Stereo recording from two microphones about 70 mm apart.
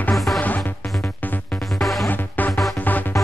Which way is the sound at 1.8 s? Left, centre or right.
Centre.